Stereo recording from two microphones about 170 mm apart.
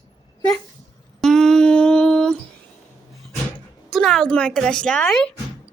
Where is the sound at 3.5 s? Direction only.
Centre (ahead or behind).